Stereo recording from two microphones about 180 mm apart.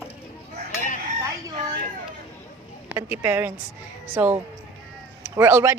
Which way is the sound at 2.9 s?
10° right (ahead or behind).